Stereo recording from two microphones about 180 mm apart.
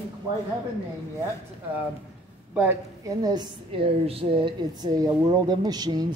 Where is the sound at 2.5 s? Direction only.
15° right (ahead or behind).